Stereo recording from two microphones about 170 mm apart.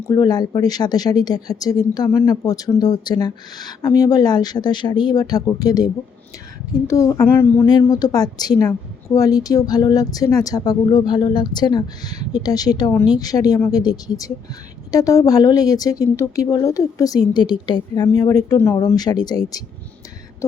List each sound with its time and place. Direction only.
0.1 s a woman's voice: 25° left (ahead or behind)